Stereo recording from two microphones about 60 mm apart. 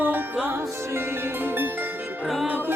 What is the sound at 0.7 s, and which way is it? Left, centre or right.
Music, right.